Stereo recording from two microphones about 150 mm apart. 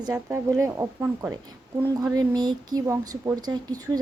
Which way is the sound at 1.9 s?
25° right (ahead or behind).